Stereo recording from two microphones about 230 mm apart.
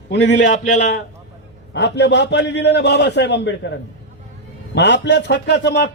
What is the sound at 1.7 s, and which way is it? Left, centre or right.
A man's voice, left.